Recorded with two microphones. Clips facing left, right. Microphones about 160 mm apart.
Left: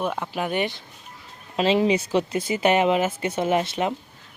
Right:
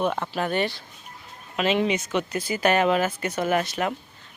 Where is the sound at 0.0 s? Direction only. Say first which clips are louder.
Right 1 dB; 10° left (ahead or behind).